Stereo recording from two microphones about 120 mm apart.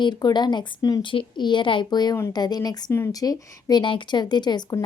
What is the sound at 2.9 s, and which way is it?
A woman's voice, 25° left (ahead or behind).